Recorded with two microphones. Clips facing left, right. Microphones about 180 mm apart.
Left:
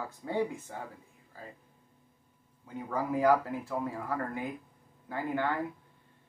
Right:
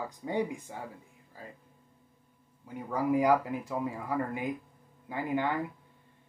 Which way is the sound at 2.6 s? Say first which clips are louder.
Right 3 dB; 15° right (ahead or behind).